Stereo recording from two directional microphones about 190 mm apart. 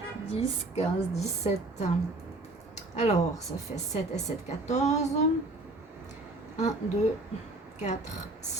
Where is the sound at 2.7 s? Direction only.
35° left (ahead or behind).